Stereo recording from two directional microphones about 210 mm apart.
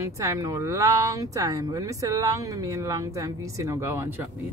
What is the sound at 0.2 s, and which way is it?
Speech, 15° right (ahead or behind).